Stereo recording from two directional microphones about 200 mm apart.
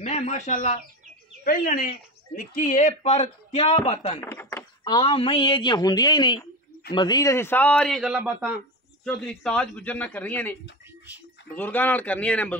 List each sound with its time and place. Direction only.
0.0 s speech: 35° left (ahead or behind)
4.2 s a man's voice: 15° left (ahead or behind); by 8.5 s 10° right (ahead or behind)
9.0 s a man's voice: 5° left (ahead or behind)
11.5 s a man's voice: 10° left (ahead or behind)